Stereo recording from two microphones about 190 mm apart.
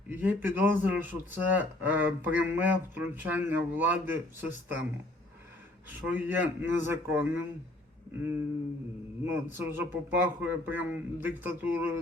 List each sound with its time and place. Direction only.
0.1 s speech: 10° right (ahead or behind)
6.1 s speech: 10° right (ahead or behind)
9.2 s speech: 10° right (ahead or behind)